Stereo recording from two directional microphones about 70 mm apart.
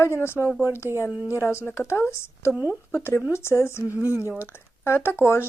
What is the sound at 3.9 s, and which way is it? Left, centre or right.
Speech, right.